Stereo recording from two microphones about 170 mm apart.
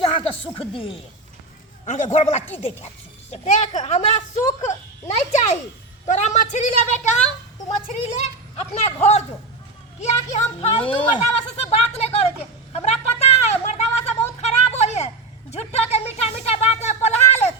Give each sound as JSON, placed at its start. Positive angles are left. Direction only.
{"t": 0.0, "sound": "speech", "side_deg": 30}
{"t": 1.9, "sound": "a woman's voice", "side_deg": 45}
{"t": 8.7, "sound": "speech", "side_deg": 40}
{"t": 12.7, "sound": "a sound", "side_deg": 40}